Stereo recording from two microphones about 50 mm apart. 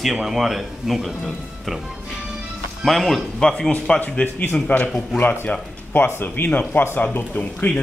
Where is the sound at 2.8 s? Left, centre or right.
Centre.